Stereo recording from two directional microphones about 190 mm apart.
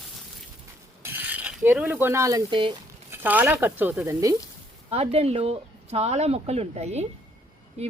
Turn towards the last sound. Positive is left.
turn(degrees=-35)  # may be behind; listen again after turning